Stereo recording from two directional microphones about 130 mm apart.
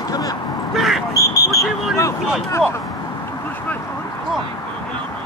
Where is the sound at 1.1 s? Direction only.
25° left (ahead or behind).